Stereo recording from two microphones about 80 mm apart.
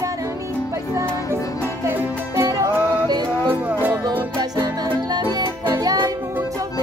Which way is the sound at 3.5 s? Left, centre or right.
Right.